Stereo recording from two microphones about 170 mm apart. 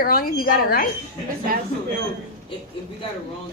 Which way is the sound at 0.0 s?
60° left (ahead or behind).